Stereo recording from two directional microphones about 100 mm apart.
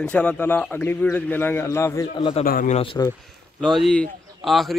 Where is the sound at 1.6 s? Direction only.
30° left (ahead or behind).